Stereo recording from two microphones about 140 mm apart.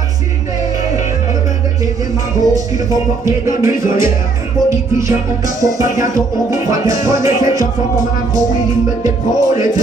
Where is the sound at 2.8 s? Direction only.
25° right (ahead or behind).